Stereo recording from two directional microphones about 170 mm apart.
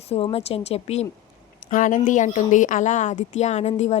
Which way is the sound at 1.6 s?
50° left (ahead or behind).